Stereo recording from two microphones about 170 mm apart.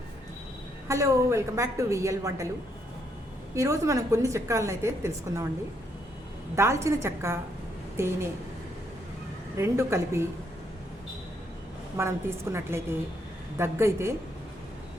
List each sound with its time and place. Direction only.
0.9 s a woman's voice: 15° right (ahead or behind)
3.5 s a woman's voice: 15° right (ahead or behind)
6.6 s a woman's voice: 15° right (ahead or behind)
9.6 s a woman's voice: 15° right (ahead or behind)
11.9 s a woman's voice: 15° right (ahead or behind)